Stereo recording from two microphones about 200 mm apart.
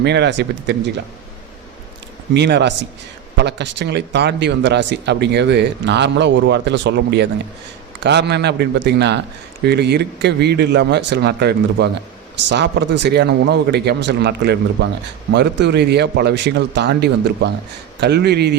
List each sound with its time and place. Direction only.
0.0 s speech: 60° right (ahead or behind)
2.3 s speech: 60° right (ahead or behind)